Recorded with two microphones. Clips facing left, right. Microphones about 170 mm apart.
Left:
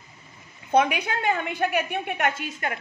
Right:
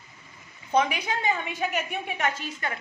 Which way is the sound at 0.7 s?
60° left (ahead or behind).